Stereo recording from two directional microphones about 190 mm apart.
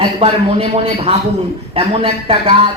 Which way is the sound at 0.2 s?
30° right (ahead or behind).